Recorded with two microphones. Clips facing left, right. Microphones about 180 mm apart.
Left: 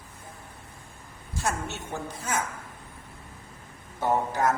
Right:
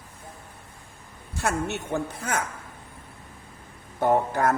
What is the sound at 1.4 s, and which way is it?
A woman's voice, 60° right (ahead or behind).